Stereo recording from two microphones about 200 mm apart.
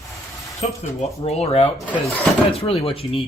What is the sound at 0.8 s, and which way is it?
Speech, 35° left (ahead or behind).